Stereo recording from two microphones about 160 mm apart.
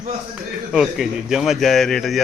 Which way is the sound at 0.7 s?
Centre (ahead or behind).